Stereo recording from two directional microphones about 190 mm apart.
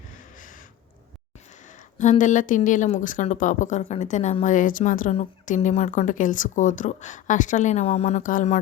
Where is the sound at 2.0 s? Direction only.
40° left (ahead or behind).